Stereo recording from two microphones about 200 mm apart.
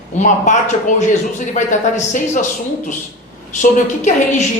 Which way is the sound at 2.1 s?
40° left (ahead or behind).